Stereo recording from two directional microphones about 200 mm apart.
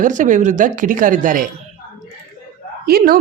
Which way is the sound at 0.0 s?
40° right (ahead or behind).